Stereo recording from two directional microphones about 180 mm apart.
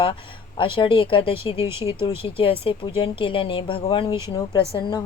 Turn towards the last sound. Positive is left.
turn(degrees=25)  # may be behind; listen again after turning